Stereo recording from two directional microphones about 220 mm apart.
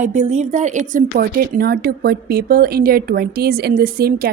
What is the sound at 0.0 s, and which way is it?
A woman's voice, 30° right (ahead or behind).